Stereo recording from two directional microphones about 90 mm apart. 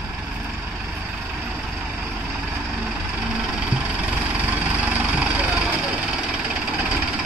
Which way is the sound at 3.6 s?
15° right (ahead or behind).